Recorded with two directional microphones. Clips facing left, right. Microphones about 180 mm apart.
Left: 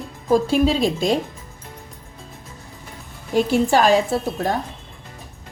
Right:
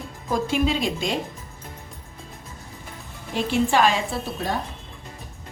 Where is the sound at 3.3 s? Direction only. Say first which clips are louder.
Left 5 dB; 40° left (ahead or behind).